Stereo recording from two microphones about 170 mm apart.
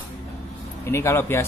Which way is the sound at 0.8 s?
15° left (ahead or behind).